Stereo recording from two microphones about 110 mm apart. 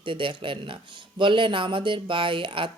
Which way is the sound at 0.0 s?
50° right (ahead or behind).